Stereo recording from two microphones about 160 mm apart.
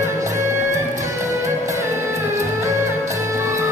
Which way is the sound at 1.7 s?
20° right (ahead or behind).